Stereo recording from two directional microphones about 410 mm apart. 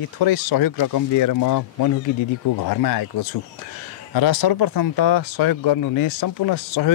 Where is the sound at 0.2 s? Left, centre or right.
Left.